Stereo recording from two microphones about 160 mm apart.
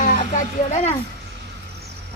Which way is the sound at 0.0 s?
55° left (ahead or behind).